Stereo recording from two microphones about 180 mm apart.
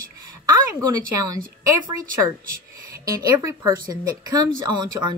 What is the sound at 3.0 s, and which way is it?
Speech, 20° right (ahead or behind).